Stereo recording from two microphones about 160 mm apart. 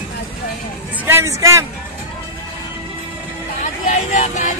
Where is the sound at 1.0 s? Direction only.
15° right (ahead or behind).